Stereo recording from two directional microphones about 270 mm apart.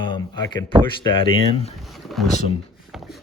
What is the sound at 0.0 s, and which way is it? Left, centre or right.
Speech, centre.